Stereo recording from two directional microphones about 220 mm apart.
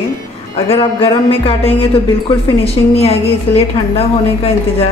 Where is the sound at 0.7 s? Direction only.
25° left (ahead or behind).